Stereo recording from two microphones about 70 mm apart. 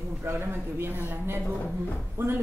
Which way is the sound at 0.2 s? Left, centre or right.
Right.